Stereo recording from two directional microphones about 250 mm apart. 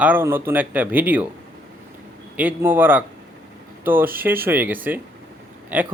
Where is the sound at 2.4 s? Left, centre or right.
Centre.